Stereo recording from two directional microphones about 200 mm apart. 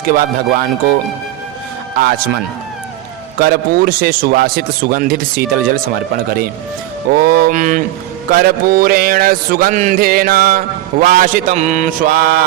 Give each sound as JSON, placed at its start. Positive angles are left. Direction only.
{"t": 0.1, "sound": "a man's voice", "side_deg": -45}
{"t": 2.0, "sound": "a man's voice", "side_deg": -50}
{"t": 11.0, "sound": "mantra", "side_deg": -40}